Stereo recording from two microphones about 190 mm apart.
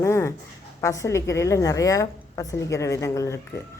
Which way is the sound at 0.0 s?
15° left (ahead or behind).